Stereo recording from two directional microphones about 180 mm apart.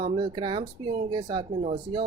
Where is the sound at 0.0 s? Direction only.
25° right (ahead or behind).